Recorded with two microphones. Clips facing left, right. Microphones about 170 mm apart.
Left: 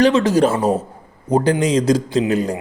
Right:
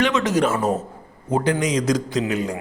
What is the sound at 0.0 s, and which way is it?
A man's voice, 30° left (ahead or behind).